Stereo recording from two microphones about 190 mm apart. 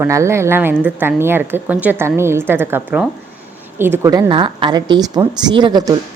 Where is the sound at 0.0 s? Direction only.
15° right (ahead or behind).